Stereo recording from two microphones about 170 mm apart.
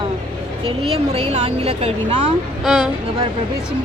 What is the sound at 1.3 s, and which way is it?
Speech, 40° right (ahead or behind).